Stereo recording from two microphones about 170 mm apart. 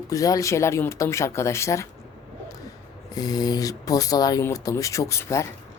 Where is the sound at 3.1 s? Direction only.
20° left (ahead or behind).